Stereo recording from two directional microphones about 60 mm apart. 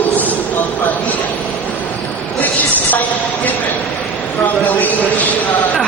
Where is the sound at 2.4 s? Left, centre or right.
Left.